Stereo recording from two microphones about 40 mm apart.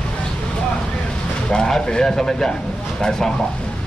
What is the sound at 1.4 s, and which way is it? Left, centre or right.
Speech, centre.